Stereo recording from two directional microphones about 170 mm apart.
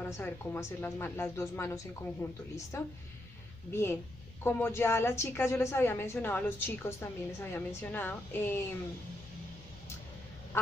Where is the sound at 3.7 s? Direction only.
15° left (ahead or behind).